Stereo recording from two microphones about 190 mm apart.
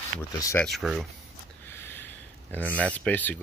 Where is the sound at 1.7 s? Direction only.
10° left (ahead or behind).